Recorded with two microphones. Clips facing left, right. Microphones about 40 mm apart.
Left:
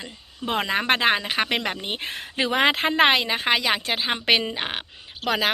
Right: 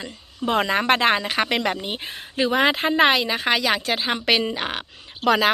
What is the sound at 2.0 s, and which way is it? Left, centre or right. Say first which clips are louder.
A woman's voice: right 2 dB; left.